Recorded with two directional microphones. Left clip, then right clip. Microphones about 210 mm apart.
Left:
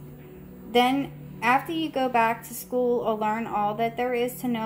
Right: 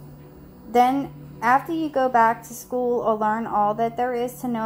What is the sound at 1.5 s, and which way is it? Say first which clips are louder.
Speech: right 4 dB; 40° right (ahead or behind).